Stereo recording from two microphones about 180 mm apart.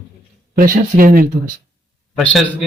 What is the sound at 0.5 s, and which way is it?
Speech, 50° right (ahead or behind).